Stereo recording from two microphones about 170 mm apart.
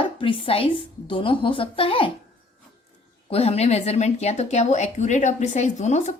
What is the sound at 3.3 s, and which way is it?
A woman's voice, 35° left (ahead or behind).